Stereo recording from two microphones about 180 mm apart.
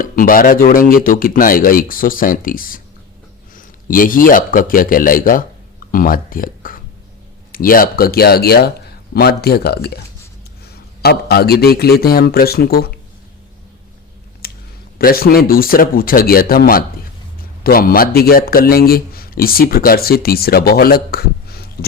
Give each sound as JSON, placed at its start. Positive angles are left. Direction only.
{"t": 0.0, "sound": "a man's voice", "side_deg": 50}
{"t": 11.0, "sound": "a man's voice", "side_deg": 60}
{"t": 14.4, "sound": "a sound", "side_deg": 60}
{"t": 14.9, "sound": "a man's voice", "side_deg": 55}